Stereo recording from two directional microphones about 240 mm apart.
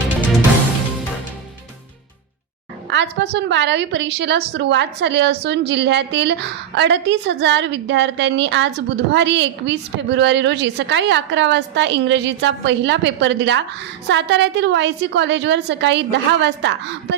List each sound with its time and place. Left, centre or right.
2.9 s a woman's voice: right